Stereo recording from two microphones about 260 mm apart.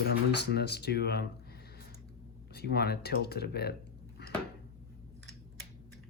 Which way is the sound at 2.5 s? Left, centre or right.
Left.